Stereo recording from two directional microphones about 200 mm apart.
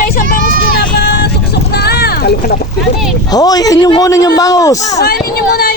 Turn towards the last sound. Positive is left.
turn(degrees=50)  # may be behind; listen again after turning